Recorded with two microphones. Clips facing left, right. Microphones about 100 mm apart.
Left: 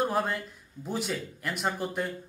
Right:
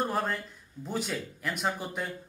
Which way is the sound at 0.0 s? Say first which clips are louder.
Left 2 dB; centre (ahead or behind).